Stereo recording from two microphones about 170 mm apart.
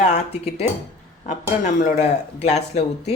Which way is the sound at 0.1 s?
40° left (ahead or behind).